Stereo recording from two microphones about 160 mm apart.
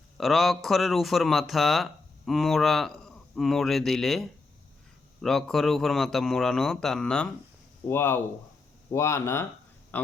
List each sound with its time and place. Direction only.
0.2 s speech: centre (ahead or behind)